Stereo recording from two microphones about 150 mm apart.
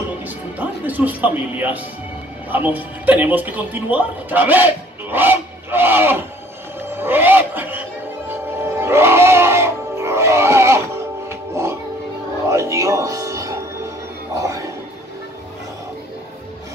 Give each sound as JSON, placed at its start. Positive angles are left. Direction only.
{"t": 0.6, "sound": "speech", "side_deg": -10}
{"t": 6.9, "sound": "music", "side_deg": -15}